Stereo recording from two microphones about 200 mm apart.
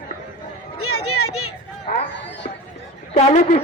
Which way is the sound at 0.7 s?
90° left.